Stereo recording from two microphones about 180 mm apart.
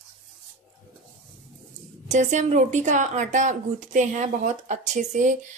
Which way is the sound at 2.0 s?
40° right (ahead or behind).